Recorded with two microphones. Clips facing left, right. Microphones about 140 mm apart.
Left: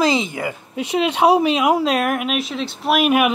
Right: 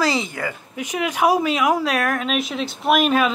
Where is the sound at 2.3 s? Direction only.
Centre (ahead or behind).